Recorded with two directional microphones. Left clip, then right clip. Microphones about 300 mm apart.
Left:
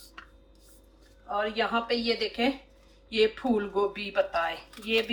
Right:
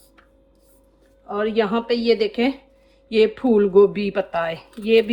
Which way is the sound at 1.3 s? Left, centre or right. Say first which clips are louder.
Right 7 dB; right.